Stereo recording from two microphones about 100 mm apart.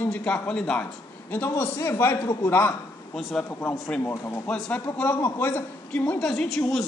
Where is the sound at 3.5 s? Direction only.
20° left (ahead or behind).